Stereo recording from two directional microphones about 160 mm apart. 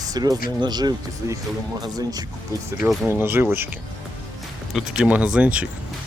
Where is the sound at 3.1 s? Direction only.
15° right (ahead or behind).